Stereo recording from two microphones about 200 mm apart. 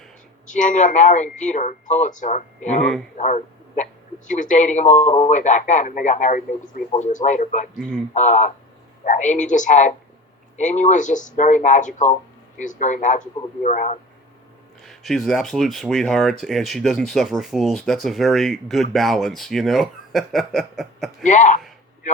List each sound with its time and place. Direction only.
0.4 s a man's voice: 40° left (ahead or behind)
14.8 s speech: centre (ahead or behind)
21.2 s a man's voice: 35° left (ahead or behind)